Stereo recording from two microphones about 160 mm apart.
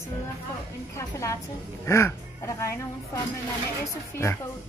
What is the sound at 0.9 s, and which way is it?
A woman's voice, 20° left (ahead or behind).